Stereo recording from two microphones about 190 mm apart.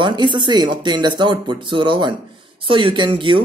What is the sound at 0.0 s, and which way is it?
Speech, 25° right (ahead or behind).